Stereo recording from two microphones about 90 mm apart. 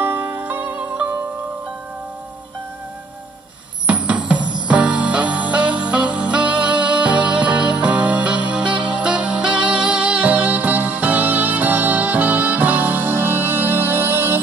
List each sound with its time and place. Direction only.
0.0 s music: 20° right (ahead or behind)
3.8 s music: 15° right (ahead or behind)
4.4 s music: 60° right (ahead or behind)
4.6 s music: 15° right (ahead or behind)